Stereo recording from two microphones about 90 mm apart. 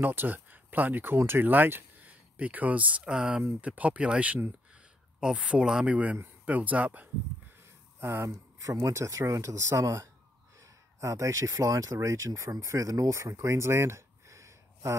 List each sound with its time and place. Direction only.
0.0 s speech: 20° right (ahead or behind)